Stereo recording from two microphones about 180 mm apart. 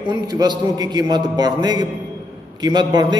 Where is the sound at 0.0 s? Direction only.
20° right (ahead or behind).